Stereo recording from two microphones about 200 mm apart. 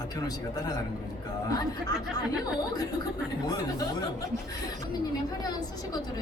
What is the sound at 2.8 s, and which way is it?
Speech, 20° left (ahead or behind).